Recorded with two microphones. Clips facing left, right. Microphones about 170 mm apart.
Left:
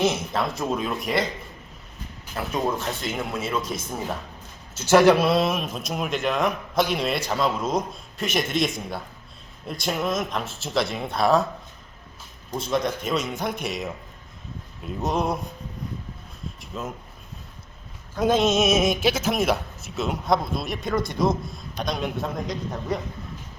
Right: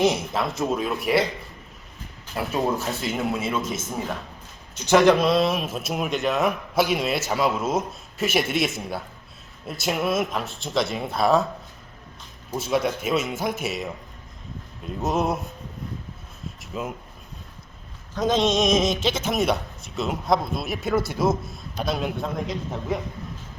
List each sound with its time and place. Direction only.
0.3 s a man's voice: centre (ahead or behind)
2.3 s a man's voice: 5° right (ahead or behind)
3.6 s speech: 25° right (ahead or behind)
4.9 s a man's voice: 10° left (ahead or behind)
12.5 s a man's voice: 5° right (ahead or behind)
16.6 s a sound: 10° right (ahead or behind)
18.1 s a man's voice: 10° left (ahead or behind)